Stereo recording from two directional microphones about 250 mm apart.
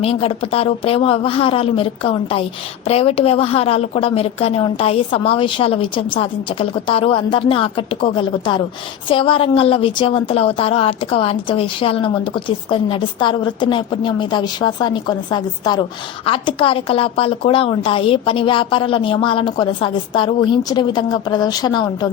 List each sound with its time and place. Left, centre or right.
0.0 s a woman's voice: left